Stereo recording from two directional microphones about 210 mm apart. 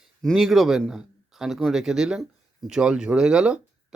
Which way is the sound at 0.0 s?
Centre (ahead or behind).